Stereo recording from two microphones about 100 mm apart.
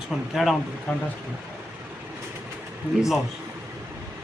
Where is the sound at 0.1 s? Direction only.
10° right (ahead or behind).